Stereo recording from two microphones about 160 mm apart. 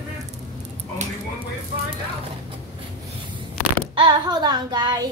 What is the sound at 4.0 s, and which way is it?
Child singing, 30° right (ahead or behind).